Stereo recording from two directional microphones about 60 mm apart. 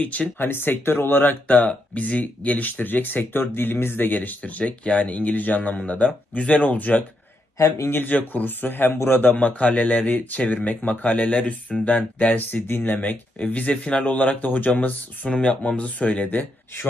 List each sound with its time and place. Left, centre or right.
0.0 s speech: left
0.5 s speech: left
7.5 s a man's voice: left
7.9 s speech: left
9.3 s speech: left
15.3 s speech: centre